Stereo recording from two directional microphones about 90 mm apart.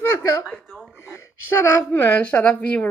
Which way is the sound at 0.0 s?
30° left (ahead or behind).